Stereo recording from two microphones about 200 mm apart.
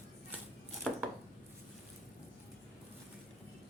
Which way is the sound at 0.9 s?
5° left (ahead or behind).